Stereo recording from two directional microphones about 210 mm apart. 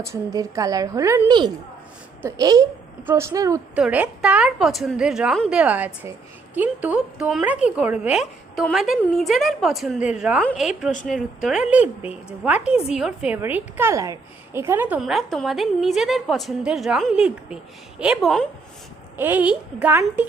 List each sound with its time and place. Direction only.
0.0 s a woman's voice: 15° right (ahead or behind)